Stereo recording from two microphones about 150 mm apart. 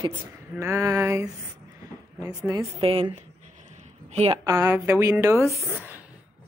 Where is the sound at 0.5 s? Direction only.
20° right (ahead or behind).